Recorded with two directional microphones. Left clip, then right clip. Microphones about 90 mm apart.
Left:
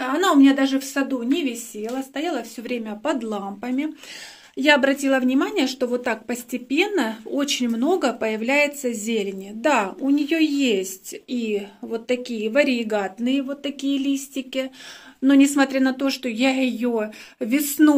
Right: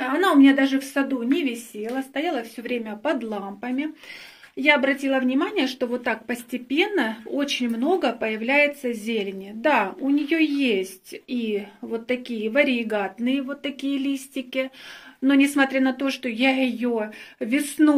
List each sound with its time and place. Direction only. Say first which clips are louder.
0.0 s a woman's voice: left 1 dB; 20° left (ahead or behind)
4.6 s a woman's voice: left 2 dB; 50° left (ahead or behind); by 11.5 s 20° left (ahead or behind)
11.5 s a woman's voice: left 2 dB; 5° left (ahead or behind)
15.2 s a woman's voice: left 2 dB; 30° left (ahead or behind)